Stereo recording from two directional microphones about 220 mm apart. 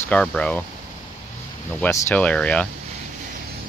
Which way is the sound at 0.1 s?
5° left (ahead or behind).